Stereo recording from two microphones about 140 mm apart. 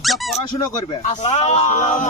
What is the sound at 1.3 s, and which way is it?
Speech, 50° left (ahead or behind).